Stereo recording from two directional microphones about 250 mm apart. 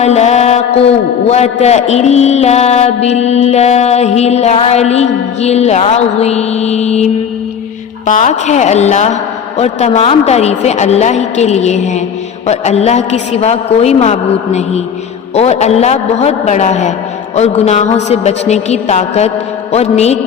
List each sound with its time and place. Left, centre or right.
0.0 s a man's voice: left